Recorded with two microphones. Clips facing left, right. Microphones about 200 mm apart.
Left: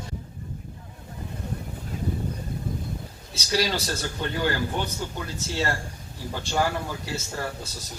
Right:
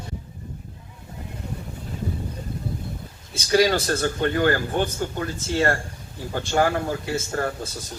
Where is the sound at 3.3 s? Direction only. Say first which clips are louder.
Right 7 dB; 50° right (ahead or behind).